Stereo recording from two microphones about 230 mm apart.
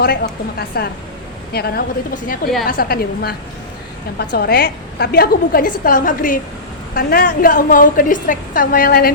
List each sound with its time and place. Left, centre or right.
0.7 s a woman's voice: left